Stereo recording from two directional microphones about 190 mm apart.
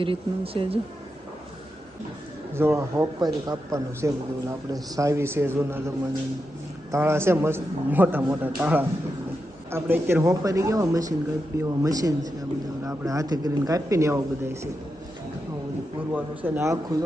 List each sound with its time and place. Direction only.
0.0 s a man's voice: 30° right (ahead or behind)
2.6 s a man's voice: 15° right (ahead or behind)
6.9 s a man's voice: 15° right (ahead or behind)
16.1 s a man's voice: 10° right (ahead or behind)